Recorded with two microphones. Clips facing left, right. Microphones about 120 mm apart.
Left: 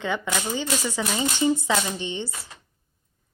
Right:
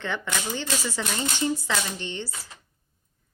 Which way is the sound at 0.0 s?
10° left (ahead or behind).